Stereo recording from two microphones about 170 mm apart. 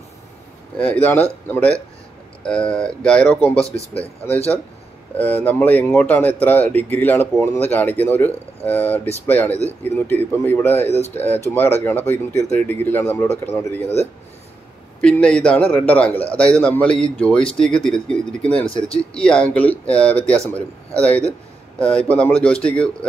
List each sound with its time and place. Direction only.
1.0 s speech: 10° left (ahead or behind)
3.5 s speech: 35° left (ahead or behind)
5.1 s speech: 10° left (ahead or behind)
10.9 s speech: 40° left (ahead or behind)
11.1 s speech: 10° left (ahead or behind)
15.0 s speech: 5° left (ahead or behind)